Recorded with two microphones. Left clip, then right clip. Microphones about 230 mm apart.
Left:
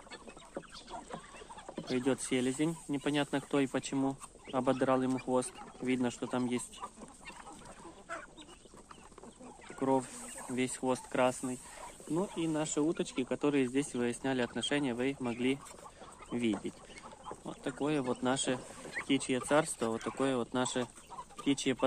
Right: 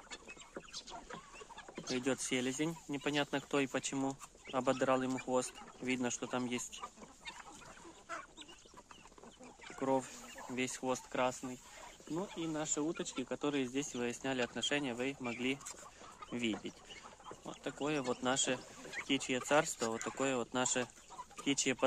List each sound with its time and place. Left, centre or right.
1.9 s speech: centre
9.8 s a sound: centre
10.5 s speech: centre